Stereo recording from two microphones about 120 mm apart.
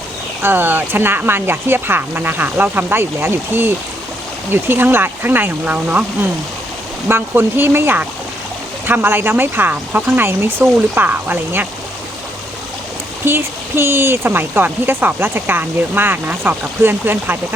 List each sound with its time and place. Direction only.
0.4 s speech: 15° right (ahead or behind)
7.1 s speech: 20° right (ahead or behind)
13.2 s speech: 20° right (ahead or behind)